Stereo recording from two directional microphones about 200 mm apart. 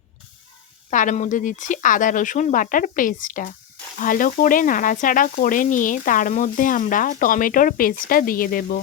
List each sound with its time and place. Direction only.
0.9 s sizzle: 40° left (ahead or behind)